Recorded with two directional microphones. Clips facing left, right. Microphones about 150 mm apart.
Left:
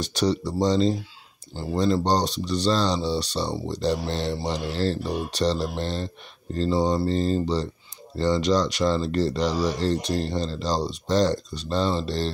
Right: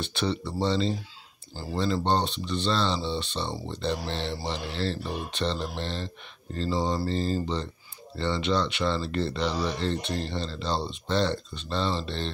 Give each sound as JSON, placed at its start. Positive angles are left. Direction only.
{"t": 0.0, "sound": "speech", "side_deg": 40}